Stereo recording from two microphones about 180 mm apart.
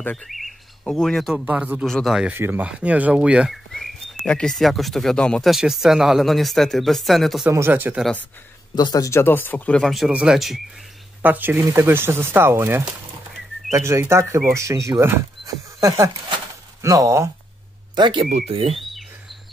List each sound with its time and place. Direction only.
0.0 s bird: 5° left (ahead or behind)
7.4 s speech: 10° right (ahead or behind)
8.7 s speech: 20° left (ahead or behind); by 18.8 s 35° right (ahead or behind)